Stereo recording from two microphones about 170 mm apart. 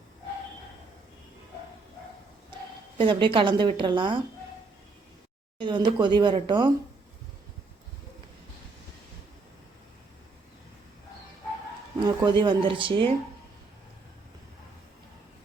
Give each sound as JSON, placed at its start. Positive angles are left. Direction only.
{"t": 3.0, "sound": "a woman's voice", "side_deg": -30}
{"t": 5.5, "sound": "a woman's voice", "side_deg": -30}
{"t": 11.9, "sound": "a woman's voice", "side_deg": -25}